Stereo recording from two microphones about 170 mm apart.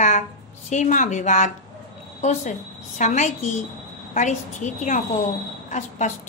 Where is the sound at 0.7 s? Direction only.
45° left (ahead or behind).